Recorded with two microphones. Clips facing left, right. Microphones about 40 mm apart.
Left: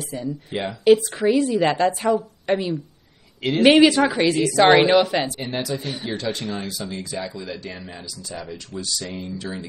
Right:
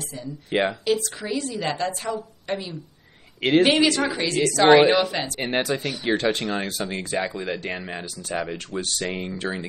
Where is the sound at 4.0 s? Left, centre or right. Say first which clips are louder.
Left 5 dB; left.